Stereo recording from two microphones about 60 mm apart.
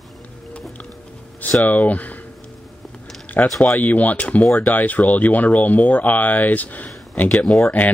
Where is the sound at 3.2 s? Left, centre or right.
Left.